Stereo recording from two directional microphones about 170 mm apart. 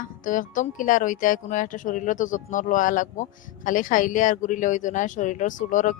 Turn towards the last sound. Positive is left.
turn(degrees=50)  # may be behind; listen again after turning